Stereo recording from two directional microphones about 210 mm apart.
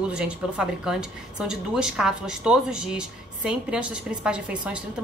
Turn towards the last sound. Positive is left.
turn(degrees=-5)  # may be behind; listen again after turning